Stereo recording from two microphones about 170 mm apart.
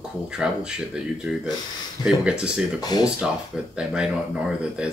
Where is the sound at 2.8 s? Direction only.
25° left (ahead or behind).